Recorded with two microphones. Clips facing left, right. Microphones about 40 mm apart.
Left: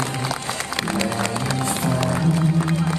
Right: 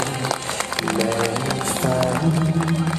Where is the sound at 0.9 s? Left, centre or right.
Centre.